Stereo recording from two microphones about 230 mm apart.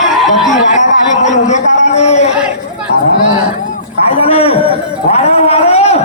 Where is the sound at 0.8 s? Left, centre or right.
Left.